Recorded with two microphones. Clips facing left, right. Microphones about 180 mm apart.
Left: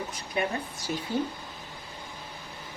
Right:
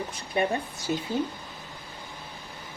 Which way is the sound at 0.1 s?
30° right (ahead or behind).